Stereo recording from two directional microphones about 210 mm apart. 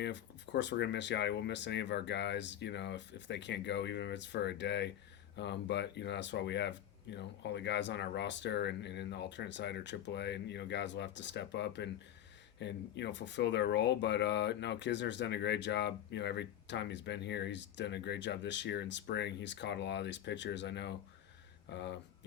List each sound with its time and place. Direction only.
0.0 s speech: 55° left (ahead or behind)